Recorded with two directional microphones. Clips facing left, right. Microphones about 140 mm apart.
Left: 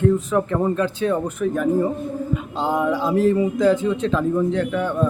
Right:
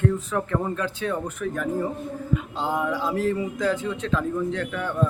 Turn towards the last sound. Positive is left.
turn(degrees=20)  # may be behind; listen again after turning